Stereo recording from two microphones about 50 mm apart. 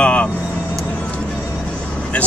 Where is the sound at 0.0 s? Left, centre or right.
Left.